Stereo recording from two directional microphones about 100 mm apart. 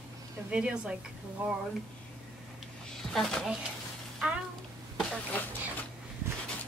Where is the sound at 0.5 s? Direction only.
10° right (ahead or behind).